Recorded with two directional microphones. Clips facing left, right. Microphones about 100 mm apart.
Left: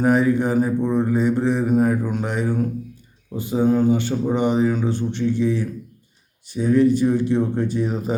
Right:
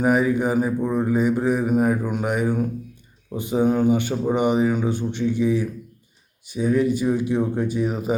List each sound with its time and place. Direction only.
0.0 s speech: 10° right (ahead or behind)